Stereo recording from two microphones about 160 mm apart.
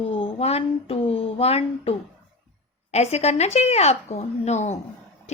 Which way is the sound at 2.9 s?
45° left (ahead or behind).